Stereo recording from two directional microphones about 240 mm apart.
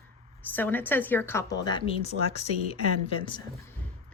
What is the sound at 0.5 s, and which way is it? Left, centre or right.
A woman's voice, centre.